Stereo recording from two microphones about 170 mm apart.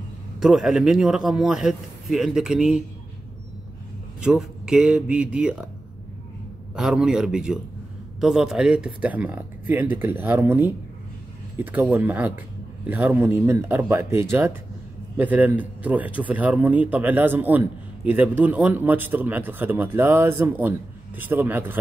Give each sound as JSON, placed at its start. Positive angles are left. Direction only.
{"t": 0.4, "sound": "a man's voice", "side_deg": 0}
{"t": 4.2, "sound": "a man's voice", "side_deg": -5}
{"t": 6.7, "sound": "a man's voice", "side_deg": -5}